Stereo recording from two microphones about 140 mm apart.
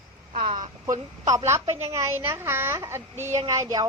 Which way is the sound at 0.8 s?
25° right (ahead or behind).